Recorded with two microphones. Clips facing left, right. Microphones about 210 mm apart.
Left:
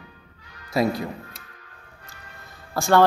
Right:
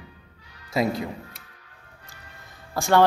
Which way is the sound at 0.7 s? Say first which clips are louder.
Left 2 dB; 20° right (ahead or behind).